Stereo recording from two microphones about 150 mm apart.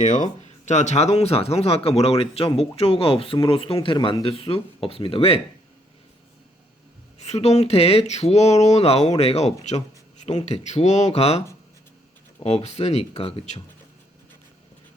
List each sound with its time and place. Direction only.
0.0 s speech: 55° left (ahead or behind); by 5.4 s 40° left (ahead or behind)
7.2 s speech: 45° left (ahead or behind)